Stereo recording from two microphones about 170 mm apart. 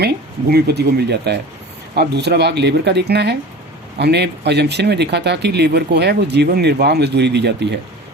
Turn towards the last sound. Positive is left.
turn(degrees=-85)